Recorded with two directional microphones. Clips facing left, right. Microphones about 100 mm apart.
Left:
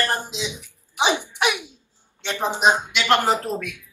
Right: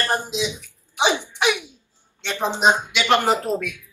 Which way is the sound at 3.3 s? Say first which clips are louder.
Right 3 dB; 15° right (ahead or behind).